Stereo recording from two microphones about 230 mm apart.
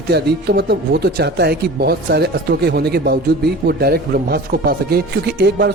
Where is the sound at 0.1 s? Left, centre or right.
Right.